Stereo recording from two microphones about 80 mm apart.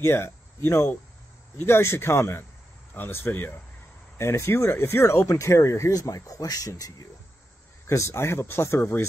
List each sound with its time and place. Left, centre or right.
0.0 s speech: left
7.8 s speech: left